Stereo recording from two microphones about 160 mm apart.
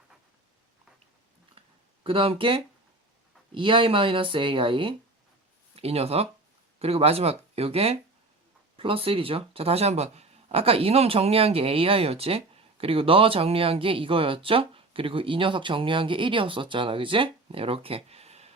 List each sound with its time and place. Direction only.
2.0 s speech: 35° right (ahead or behind)